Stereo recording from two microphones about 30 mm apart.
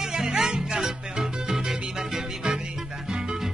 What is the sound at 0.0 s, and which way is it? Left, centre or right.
Music, right.